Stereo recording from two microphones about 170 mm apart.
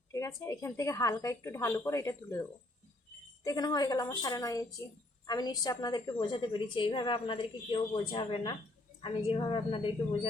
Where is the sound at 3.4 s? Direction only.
20° left (ahead or behind).